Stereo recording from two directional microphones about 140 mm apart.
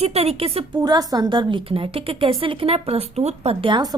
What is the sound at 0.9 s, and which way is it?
A woman's voice, 25° right (ahead or behind).